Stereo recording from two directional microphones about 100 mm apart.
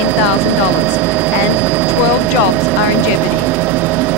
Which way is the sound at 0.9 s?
20° right (ahead or behind).